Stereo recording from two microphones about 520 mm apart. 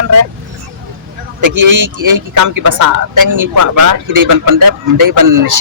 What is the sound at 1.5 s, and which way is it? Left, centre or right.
Speech, right.